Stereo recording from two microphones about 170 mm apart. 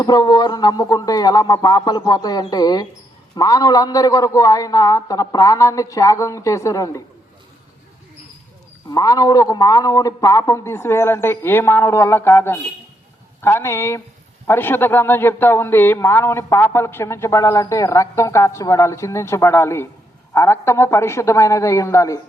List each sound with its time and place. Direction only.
0.0 s a man's voice: 25° left (ahead or behind)
8.9 s a man's voice: 20° left (ahead or behind)